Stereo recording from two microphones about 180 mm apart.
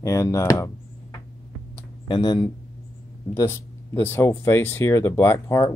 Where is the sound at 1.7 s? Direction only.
25° left (ahead or behind).